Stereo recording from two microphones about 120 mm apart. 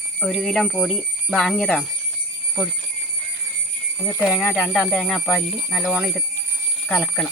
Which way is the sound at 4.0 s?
15° left (ahead or behind).